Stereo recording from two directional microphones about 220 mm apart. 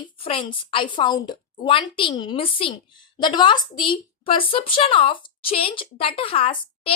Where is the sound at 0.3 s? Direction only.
25° left (ahead or behind).